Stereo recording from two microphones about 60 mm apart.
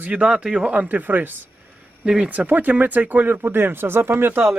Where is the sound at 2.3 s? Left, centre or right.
Right.